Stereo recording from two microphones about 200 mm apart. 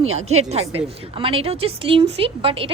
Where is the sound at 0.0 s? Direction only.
90° right.